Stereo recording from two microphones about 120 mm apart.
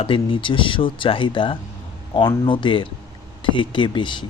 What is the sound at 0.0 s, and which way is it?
Speech, 45° left (ahead or behind).